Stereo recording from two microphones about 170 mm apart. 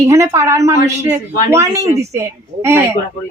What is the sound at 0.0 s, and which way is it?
A woman's voice, 15° right (ahead or behind).